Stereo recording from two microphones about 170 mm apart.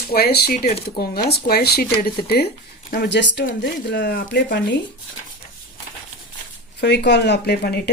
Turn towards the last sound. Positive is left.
turn(degrees=70)  # may be behind; listen again after turning